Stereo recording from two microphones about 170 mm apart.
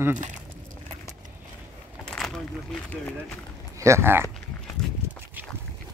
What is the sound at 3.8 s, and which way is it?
Speech, 15° right (ahead or behind).